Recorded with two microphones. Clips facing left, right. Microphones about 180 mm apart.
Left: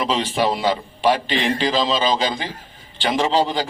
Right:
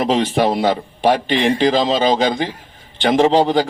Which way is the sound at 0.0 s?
60° right (ahead or behind).